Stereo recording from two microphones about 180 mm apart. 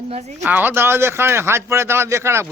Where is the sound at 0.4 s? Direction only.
10° right (ahead or behind).